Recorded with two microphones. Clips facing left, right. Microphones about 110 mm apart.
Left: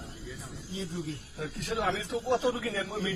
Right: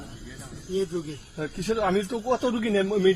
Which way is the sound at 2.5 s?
75° right (ahead or behind).